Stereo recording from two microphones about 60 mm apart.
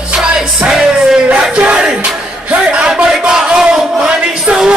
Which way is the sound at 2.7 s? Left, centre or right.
Centre.